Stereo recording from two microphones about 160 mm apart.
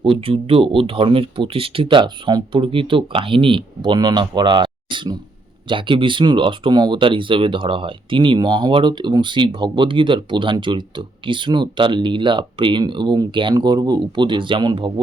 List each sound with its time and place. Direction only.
0.0 s speech: 35° right (ahead or behind)